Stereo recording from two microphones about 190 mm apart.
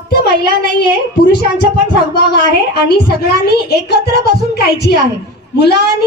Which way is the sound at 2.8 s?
55° left (ahead or behind).